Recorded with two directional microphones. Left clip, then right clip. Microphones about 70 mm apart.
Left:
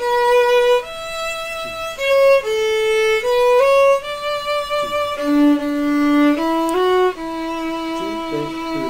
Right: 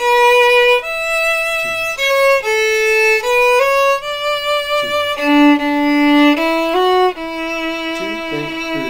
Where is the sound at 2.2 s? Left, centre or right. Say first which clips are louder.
Even; right.